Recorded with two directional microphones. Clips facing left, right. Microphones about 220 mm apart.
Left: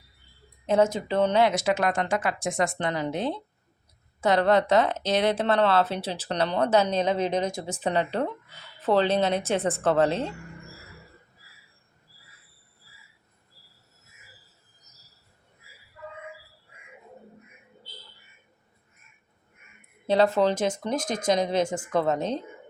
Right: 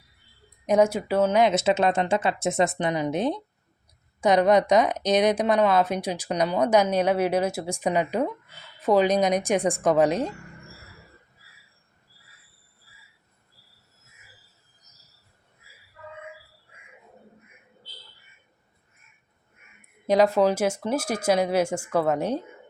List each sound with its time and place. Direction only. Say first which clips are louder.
0.6 s speech: right 2 dB; 15° right (ahead or behind)
20.1 s speech: right 2 dB; 10° right (ahead or behind)